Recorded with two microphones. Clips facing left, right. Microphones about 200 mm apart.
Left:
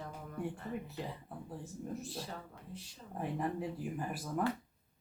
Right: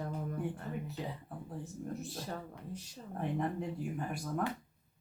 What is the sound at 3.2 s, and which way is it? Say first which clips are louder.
Speech: right 1 dB; 5° left (ahead or behind).